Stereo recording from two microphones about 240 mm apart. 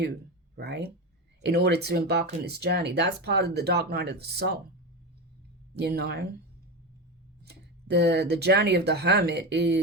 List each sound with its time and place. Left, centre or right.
0.5 s speech: right
5.7 s speech: right
7.4 s speech: right